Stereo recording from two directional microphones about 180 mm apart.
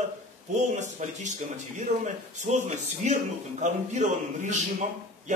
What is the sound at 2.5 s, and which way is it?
A man's voice, 40° right (ahead or behind).